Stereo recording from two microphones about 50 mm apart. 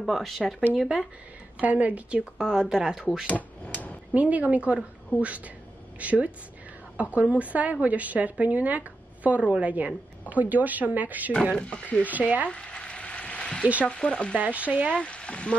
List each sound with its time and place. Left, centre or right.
0.0 s speech: centre
1.6 s a woman's voice: right
2.3 s speech: centre
3.3 s a sound: left
4.1 s speech: right
5.1 s a woman's voice: left
5.9 s a woman's voice: right
11.5 s speech: left
12.0 s speech: right
12.4 s a sound: centre
13.8 s speech: left
14.3 s a woman's voice: right
15.0 s speech: left